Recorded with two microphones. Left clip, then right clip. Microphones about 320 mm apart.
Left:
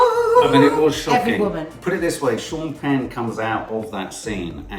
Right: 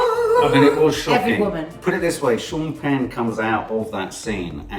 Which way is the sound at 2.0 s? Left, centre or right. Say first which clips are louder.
Right 1 dB; centre.